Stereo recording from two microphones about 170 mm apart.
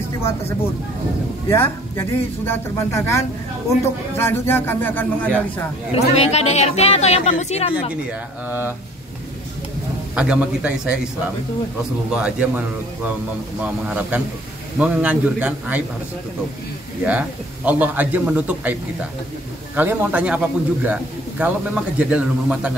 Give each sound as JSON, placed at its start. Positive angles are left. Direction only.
{"t": 1.5, "sound": "speech", "side_deg": 15}
{"t": 5.9, "sound": "a woman's voice", "side_deg": 40}
{"t": 8.5, "sound": "a man's voice", "side_deg": -10}
{"t": 10.1, "sound": "a man's voice", "side_deg": -5}
{"t": 12.1, "sound": "a man's voice", "side_deg": -5}
{"t": 17.0, "sound": "a man's voice", "side_deg": -10}